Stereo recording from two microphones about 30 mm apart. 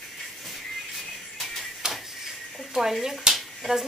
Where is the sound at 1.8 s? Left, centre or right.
Right.